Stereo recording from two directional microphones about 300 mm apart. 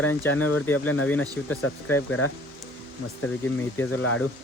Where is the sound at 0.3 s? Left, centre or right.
Left.